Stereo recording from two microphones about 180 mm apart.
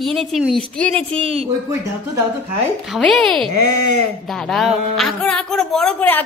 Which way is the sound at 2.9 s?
5° left (ahead or behind).